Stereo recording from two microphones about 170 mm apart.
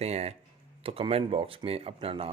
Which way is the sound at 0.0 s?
40° right (ahead or behind).